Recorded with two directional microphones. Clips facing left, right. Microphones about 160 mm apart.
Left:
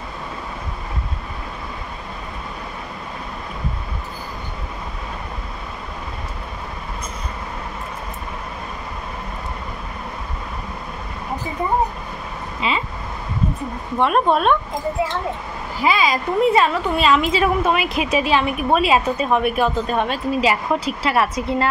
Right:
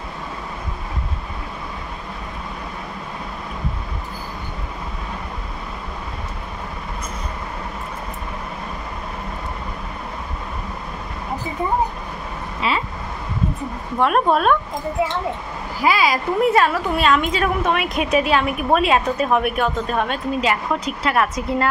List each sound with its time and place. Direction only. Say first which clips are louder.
12.6 s a sound: right 1 dB; centre (ahead or behind)
13.9 s a woman's voice: even; centre (ahead or behind)
15.8 s a woman's voice: even; 5° right (ahead or behind)